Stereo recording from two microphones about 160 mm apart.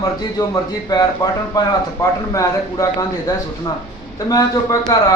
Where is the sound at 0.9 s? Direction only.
25° left (ahead or behind).